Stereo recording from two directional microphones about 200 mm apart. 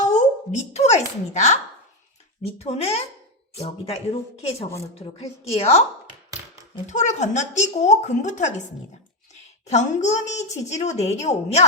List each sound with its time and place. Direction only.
0.0 s a sound: 35° left (ahead or behind)
2.6 s a woman's voice: 30° left (ahead or behind)
6.8 s a woman's voice: 35° left (ahead or behind)